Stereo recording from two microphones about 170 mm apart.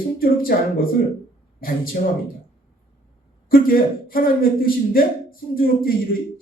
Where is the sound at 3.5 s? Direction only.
60° left (ahead or behind).